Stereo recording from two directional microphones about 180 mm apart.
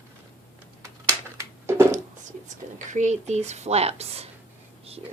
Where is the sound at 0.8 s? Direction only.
15° right (ahead or behind).